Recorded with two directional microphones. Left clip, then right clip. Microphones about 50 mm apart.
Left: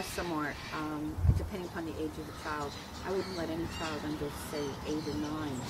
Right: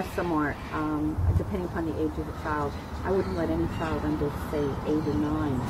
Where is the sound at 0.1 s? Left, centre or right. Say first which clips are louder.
Right 9 dB; left.